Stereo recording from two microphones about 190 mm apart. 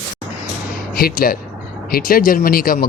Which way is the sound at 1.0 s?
50° left (ahead or behind).